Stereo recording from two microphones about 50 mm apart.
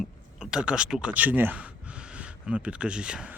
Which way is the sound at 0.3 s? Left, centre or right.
Centre.